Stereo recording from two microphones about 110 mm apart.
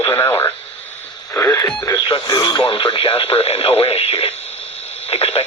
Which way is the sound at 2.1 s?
40° left (ahead or behind).